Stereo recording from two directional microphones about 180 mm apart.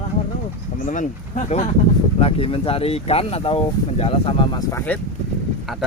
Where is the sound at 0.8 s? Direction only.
45° left (ahead or behind); by 4.6 s 25° left (ahead or behind).